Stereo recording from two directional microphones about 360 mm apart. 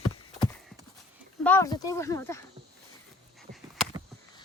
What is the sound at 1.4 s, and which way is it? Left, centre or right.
Speech, centre.